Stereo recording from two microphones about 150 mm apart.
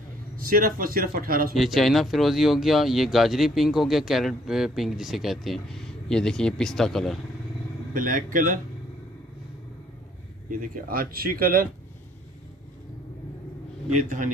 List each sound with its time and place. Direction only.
0.4 s speech: 70° right (ahead or behind)
1.5 s speech: centre (ahead or behind)
7.9 s speech: 65° right (ahead or behind)
10.5 s speech: 65° right (ahead or behind)
13.9 s speech: 60° right (ahead or behind)